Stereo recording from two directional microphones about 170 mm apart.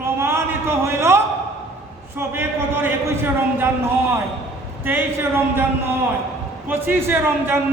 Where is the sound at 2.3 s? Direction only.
10° right (ahead or behind).